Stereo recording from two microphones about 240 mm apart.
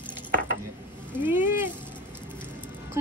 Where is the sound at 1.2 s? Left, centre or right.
Centre.